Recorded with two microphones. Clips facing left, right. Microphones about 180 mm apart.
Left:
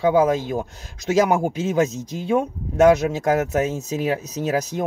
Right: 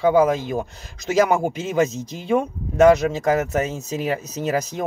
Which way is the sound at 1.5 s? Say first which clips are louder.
Even; 40° left (ahead or behind).